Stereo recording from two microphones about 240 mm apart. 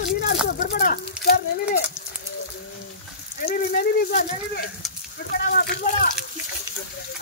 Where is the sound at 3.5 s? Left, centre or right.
Left.